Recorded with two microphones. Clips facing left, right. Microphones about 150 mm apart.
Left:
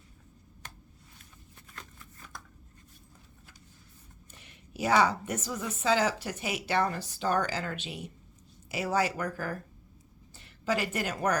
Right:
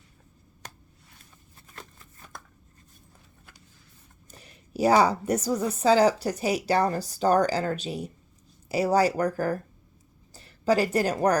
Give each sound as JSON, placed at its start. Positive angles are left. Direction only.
{"t": 1.7, "sound": "shuffling cards", "side_deg": -35}
{"t": 4.3, "sound": "a woman's voice", "side_deg": -35}